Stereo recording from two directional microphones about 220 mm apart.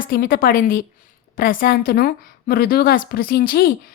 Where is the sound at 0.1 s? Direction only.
40° left (ahead or behind).